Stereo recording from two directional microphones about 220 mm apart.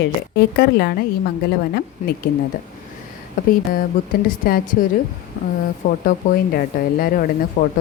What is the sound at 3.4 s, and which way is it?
A woman's voice, 35° left (ahead or behind).